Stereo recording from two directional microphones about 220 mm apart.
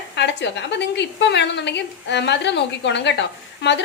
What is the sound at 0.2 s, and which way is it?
A woman's voice, 50° left (ahead or behind).